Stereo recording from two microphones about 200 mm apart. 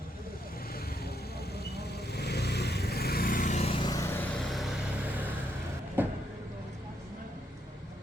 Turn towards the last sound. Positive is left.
turn(degrees=-10)  # may be behind; listen again after turning